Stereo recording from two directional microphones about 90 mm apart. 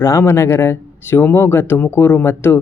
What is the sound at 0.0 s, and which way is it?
Speech, 30° left (ahead or behind).